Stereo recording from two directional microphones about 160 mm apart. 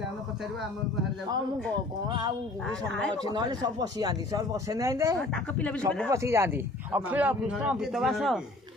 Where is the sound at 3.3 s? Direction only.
25° right (ahead or behind).